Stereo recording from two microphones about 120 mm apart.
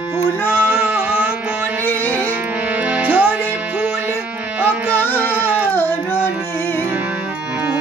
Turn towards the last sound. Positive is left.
turn(degrees=20)  # may be behind; listen again after turning